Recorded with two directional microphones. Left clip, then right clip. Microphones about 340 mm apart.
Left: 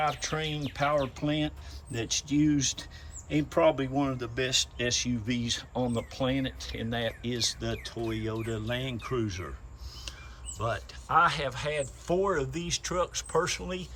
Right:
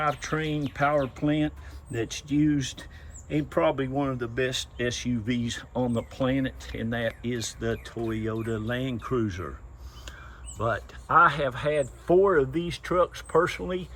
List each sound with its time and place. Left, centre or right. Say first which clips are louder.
0.0 s speech: right 2 dB; centre
10.6 s speech: right 4 dB; centre